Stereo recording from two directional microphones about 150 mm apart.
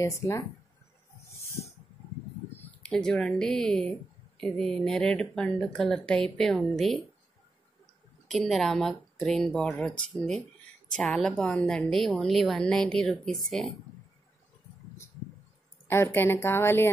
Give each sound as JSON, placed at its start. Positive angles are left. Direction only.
{"t": 0.0, "sound": "speech", "side_deg": 20}
{"t": 2.8, "sound": "a woman's voice", "side_deg": 5}
{"t": 8.3, "sound": "a woman's voice", "side_deg": 0}
{"t": 15.9, "sound": "a woman's voice", "side_deg": 15}